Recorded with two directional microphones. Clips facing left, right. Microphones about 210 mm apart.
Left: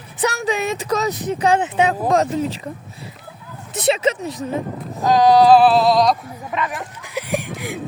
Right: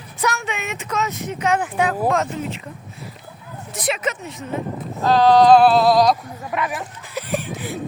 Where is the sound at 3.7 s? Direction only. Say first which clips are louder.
Left 6 dB; 25° left (ahead or behind).